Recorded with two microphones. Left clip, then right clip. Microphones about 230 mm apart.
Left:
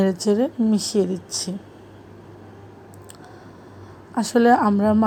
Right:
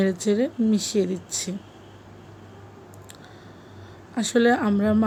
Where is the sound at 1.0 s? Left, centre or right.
Centre.